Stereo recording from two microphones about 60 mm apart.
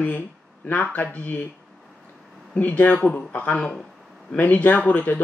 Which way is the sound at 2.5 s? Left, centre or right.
Left.